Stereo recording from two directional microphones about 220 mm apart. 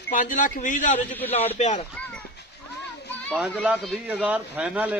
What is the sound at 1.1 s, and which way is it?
Speech, 10° left (ahead or behind).